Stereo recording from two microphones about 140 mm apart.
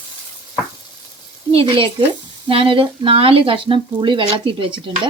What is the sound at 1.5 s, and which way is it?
A woman's voice, 40° right (ahead or behind).